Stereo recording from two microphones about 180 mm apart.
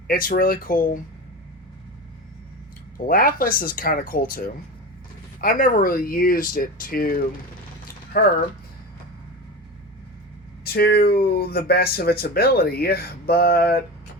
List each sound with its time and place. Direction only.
0.1 s speech: 50° left (ahead or behind)
3.0 s speech: 50° left (ahead or behind)
8.2 s speech: 55° left (ahead or behind)
10.6 s speech: 60° left (ahead or behind)